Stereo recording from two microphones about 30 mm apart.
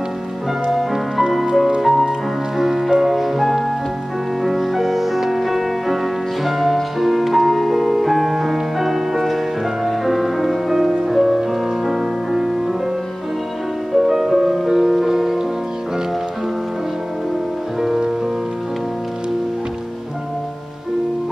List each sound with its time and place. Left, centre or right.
0.7 s music: centre
13.9 s music: centre
17.7 s music: centre